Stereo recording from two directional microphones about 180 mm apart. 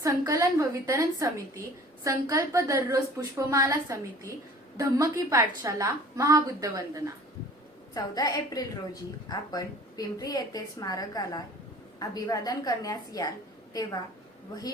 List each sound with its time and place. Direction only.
0.0 s a woman's voice: 15° right (ahead or behind)
7.9 s a woman's voice: 20° left (ahead or behind)